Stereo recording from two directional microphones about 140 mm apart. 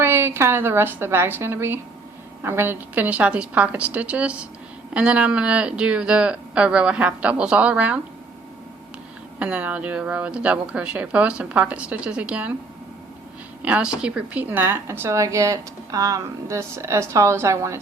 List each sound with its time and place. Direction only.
0.0 s speech: 15° right (ahead or behind)
9.4 s speech: 10° right (ahead or behind)
13.6 s a woman's voice: 10° right (ahead or behind)